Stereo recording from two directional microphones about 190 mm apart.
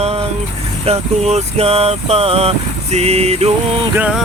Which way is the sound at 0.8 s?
35° right (ahead or behind).